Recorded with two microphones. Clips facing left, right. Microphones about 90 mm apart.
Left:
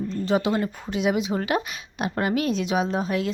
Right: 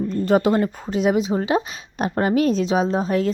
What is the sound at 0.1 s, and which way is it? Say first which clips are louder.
A woman's voice: right 5 dB; 45° right (ahead or behind).